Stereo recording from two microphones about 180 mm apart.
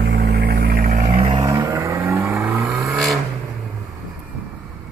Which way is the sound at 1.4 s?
20° right (ahead or behind).